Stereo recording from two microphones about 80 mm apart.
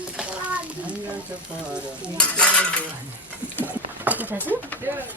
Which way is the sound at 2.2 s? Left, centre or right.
Centre.